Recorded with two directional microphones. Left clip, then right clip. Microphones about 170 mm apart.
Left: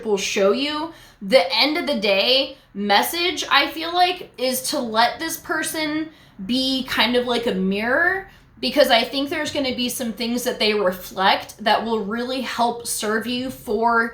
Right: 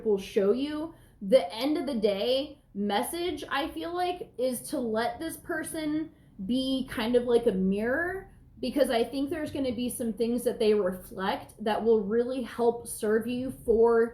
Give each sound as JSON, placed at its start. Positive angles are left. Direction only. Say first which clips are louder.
{"t": 0.1, "sound": "a woman's voice", "louder": "left 7 dB", "side_deg": 15}